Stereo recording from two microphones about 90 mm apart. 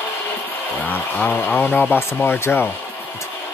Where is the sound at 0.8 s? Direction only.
20° left (ahead or behind).